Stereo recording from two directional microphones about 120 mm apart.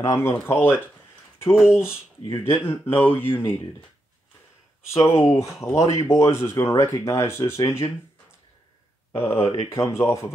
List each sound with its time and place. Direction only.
0.5 s speech: 15° left (ahead or behind)
1.5 s speech: 5° right (ahead or behind)
2.2 s speech: 25° left (ahead or behind)
4.9 s speech: 25° left (ahead or behind)
9.1 s speech: 55° left (ahead or behind)
9.7 s speech: 25° left (ahead or behind)